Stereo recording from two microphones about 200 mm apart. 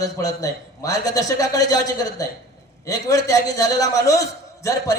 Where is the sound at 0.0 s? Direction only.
20° left (ahead or behind).